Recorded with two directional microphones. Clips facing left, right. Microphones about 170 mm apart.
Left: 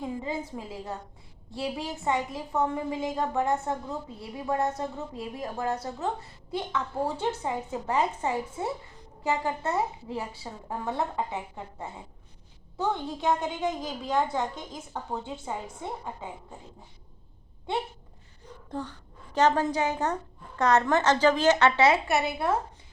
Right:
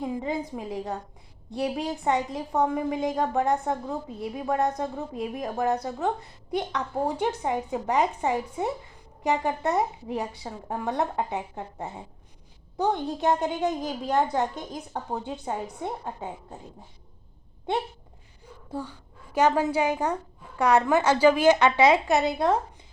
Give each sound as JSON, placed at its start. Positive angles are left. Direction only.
{"t": 0.0, "sound": "a woman's voice", "side_deg": -20}
{"t": 18.7, "sound": "a woman's voice", "side_deg": -10}